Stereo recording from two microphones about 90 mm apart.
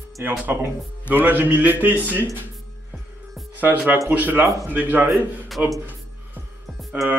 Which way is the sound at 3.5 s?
20° right (ahead or behind).